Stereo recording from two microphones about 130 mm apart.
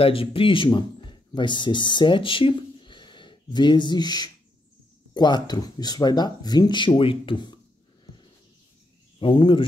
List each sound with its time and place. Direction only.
0.0 s speech: 45° left (ahead or behind)
9.2 s speech: 40° left (ahead or behind)